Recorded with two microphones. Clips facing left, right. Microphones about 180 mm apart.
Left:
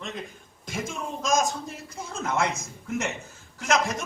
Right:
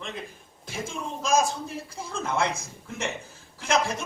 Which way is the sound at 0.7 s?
30° right (ahead or behind).